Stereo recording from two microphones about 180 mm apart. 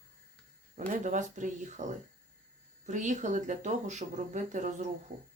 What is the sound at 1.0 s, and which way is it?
Speech, 45° right (ahead or behind).